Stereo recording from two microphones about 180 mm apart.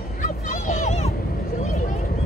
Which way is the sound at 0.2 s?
45° left (ahead or behind).